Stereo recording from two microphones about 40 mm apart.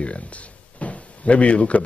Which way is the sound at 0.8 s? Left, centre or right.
Left.